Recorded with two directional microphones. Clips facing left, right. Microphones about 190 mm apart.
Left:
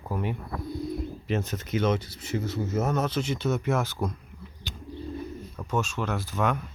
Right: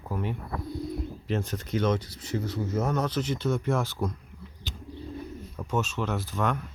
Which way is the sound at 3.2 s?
10° left (ahead or behind).